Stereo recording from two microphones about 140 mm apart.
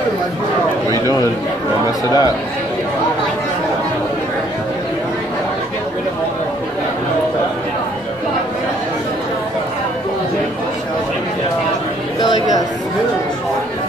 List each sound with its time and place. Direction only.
1.9 s a man's voice: 30° left (ahead or behind)